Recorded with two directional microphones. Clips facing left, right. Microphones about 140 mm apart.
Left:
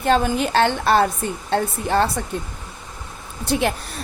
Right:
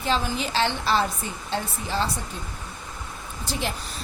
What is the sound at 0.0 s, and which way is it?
Speech, 55° left (ahead or behind).